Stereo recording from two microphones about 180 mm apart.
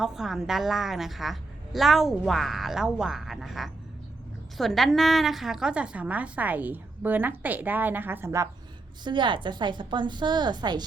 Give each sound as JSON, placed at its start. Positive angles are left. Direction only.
{"t": 0.0, "sound": "a woman's voice", "side_deg": 0}
{"t": 9.0, "sound": "a woman's voice", "side_deg": -25}